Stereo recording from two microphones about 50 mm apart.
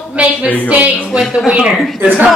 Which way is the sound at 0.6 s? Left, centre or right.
Right.